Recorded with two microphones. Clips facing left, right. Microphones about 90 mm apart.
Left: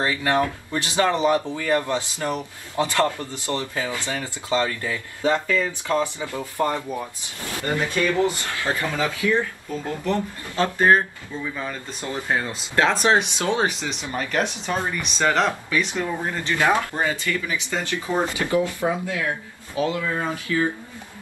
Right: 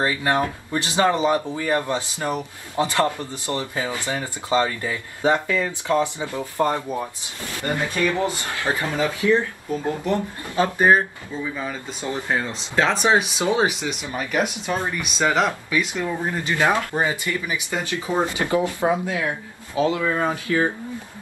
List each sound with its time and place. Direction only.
0.0 s speech: 20° right (ahead or behind)
12.4 s speech: centre (ahead or behind); by 20.0 s 25° right (ahead or behind)
20.5 s speech: 50° right (ahead or behind)